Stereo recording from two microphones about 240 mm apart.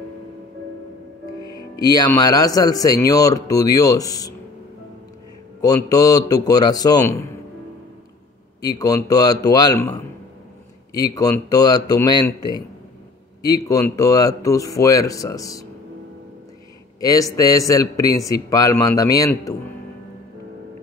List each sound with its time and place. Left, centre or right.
1.5 s speech: centre
5.6 s speech: centre
8.5 s speech: centre
11.1 s speech: centre
17.0 s speech: centre